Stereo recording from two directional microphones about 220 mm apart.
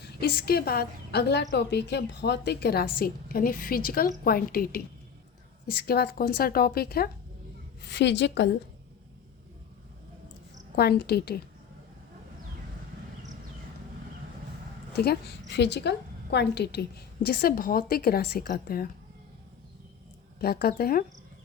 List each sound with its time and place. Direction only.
0.2 s a woman's voice: 45° left (ahead or behind)
10.8 s a woman's voice: 45° left (ahead or behind)
14.9 s a woman's voice: 45° left (ahead or behind)
20.4 s a woman's voice: 45° left (ahead or behind)